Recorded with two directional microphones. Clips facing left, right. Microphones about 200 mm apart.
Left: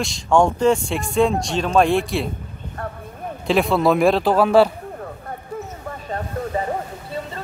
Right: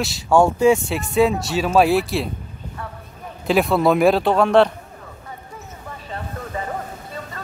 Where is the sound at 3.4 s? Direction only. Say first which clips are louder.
Even; centre (ahead or behind).